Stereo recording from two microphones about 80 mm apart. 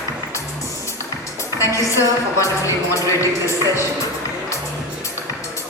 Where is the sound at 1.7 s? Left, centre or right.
Left.